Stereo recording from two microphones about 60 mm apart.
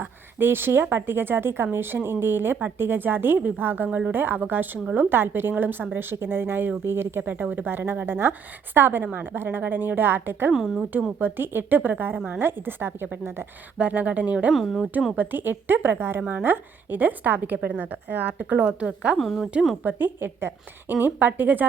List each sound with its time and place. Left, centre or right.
0.0 s a woman's voice: right
13.7 s a woman's voice: right
14.5 s speech: centre
15.1 s a woman's voice: right
19.1 s speech: centre
19.8 s a woman's voice: right